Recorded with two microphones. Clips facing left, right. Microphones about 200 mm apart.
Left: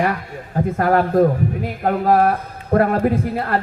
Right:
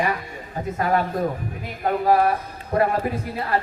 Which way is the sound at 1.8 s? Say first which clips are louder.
Left 3 dB; 50° left (ahead or behind).